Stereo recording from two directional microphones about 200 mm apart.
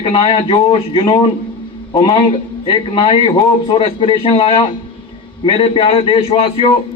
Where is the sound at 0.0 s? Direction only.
25° left (ahead or behind).